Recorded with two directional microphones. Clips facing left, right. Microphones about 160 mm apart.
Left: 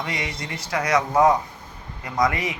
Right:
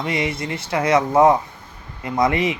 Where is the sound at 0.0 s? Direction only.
25° right (ahead or behind).